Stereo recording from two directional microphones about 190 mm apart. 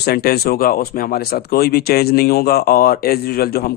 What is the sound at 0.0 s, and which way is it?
Speech, 55° left (ahead or behind).